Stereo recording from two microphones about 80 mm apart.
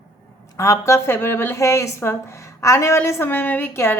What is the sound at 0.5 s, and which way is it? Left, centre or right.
Speech, left.